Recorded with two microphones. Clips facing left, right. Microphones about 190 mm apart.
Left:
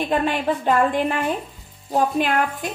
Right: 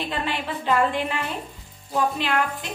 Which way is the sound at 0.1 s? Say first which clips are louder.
Left 7 dB; 45° left (ahead or behind).